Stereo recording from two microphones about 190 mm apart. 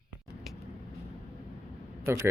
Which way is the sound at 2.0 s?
15° right (ahead or behind).